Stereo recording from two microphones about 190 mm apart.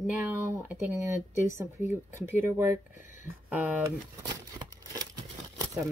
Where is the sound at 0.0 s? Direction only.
10° right (ahead or behind).